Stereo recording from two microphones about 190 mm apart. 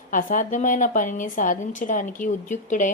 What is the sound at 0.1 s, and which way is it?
A woman's voice, 45° left (ahead or behind).